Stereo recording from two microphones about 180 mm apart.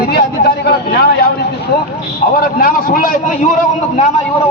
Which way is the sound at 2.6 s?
55° left (ahead or behind).